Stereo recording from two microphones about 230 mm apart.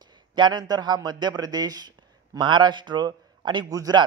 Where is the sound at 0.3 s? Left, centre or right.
Centre.